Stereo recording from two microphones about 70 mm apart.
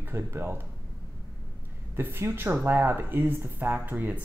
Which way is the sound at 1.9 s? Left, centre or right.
Right.